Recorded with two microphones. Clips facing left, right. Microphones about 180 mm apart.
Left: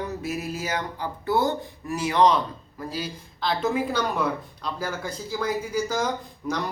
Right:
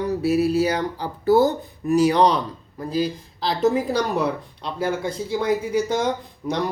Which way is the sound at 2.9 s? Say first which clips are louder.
Right 13 dB; 35° right (ahead or behind).